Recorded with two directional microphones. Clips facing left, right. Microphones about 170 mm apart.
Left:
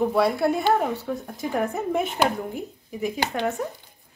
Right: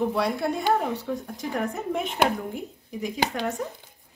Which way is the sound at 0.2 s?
5° left (ahead or behind).